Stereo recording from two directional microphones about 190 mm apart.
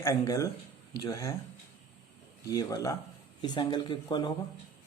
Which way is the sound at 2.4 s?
20° left (ahead or behind).